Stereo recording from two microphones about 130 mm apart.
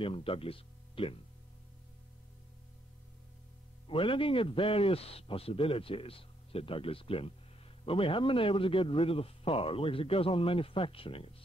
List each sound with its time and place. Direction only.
0.0 s a man's voice: 45° left (ahead or behind)
3.8 s a man's voice: 40° left (ahead or behind)